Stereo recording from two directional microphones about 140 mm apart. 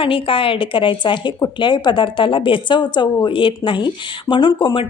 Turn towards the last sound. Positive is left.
turn(degrees=35)  # may be behind; listen again after turning